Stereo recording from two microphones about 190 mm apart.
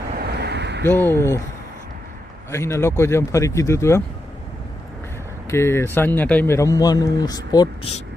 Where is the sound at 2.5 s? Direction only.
15° left (ahead or behind).